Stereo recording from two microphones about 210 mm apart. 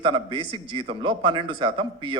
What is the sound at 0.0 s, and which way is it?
A man's voice, 25° right (ahead or behind).